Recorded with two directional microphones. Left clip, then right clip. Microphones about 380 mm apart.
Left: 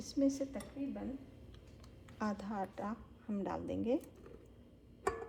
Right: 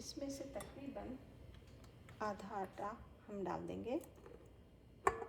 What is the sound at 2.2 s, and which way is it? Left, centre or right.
A woman's voice, centre.